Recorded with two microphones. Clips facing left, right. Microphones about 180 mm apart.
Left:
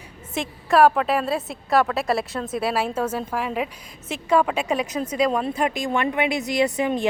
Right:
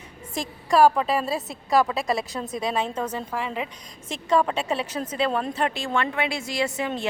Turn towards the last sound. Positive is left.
turn(degrees=15)  # may be behind; listen again after turning